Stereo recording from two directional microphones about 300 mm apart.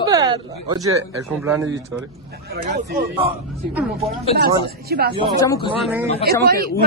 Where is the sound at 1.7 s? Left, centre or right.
Right.